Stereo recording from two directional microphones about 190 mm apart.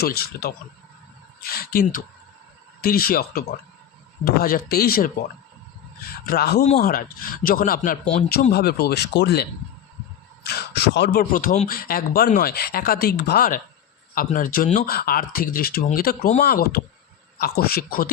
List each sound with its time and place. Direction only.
0.0 s speech: 55° left (ahead or behind)
6.2 s speech: 55° left (ahead or behind)